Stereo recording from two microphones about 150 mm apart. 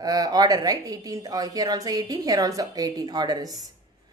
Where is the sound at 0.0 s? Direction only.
25° right (ahead or behind).